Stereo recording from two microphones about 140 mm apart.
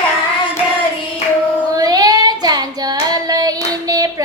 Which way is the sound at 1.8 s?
25° right (ahead or behind).